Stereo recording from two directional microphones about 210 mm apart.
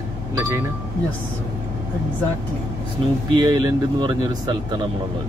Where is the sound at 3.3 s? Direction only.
20° right (ahead or behind).